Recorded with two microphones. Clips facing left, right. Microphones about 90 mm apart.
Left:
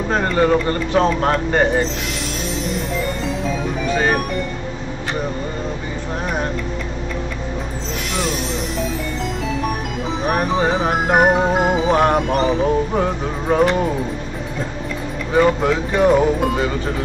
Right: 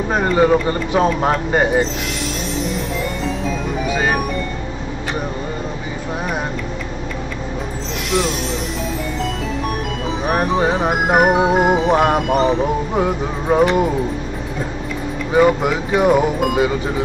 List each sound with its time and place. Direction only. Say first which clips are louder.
0.1 s speech: right 2 dB; 10° right (ahead or behind)
3.4 s music: left 1 dB; 5° right (ahead or behind)
8.1 s music: right 4 dB; centre (ahead or behind)
10.2 s speech: right 1 dB; centre (ahead or behind)
15.3 s speech: right 1 dB; 10° right (ahead or behind)